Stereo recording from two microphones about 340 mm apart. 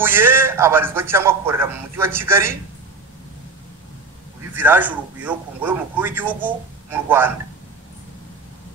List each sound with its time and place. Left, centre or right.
0.0 s a man's voice: centre
4.6 s a man's voice: centre